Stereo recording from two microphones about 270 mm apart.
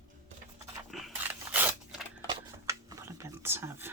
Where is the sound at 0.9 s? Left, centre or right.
Centre.